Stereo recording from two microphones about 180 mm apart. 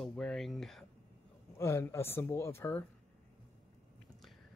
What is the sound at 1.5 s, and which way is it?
Speech, 15° left (ahead or behind).